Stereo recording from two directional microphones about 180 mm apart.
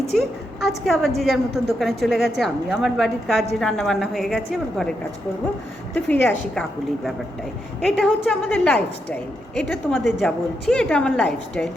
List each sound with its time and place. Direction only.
0.1 s a woman's voice: centre (ahead or behind)